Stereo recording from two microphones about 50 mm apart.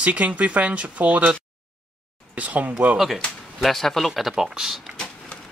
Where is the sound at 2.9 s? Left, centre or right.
Centre.